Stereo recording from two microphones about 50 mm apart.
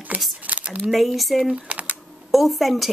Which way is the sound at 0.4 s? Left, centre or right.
Right.